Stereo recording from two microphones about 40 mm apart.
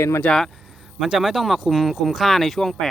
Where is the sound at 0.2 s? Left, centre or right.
Left.